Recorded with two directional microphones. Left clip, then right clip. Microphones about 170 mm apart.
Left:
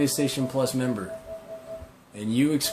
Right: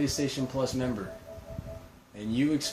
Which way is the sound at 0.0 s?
50° left (ahead or behind).